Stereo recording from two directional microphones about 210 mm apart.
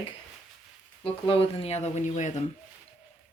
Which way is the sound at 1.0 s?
25° left (ahead or behind).